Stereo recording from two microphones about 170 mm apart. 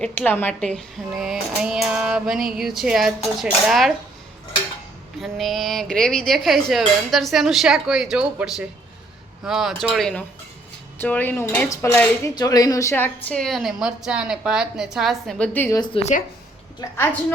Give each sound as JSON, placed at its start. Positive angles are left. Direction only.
{"t": 0.0, "sound": "dishes", "side_deg": 10}
{"t": 5.2, "sound": "dishes", "side_deg": 0}
{"t": 11.0, "sound": "speech", "side_deg": 10}
{"t": 15.8, "sound": "a woman's voice", "side_deg": 35}
{"t": 16.8, "sound": "a woman's voice", "side_deg": 20}